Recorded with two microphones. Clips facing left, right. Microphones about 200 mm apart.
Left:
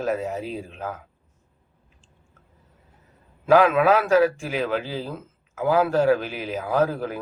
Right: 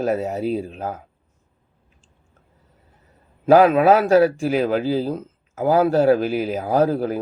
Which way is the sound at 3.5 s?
40° right (ahead or behind).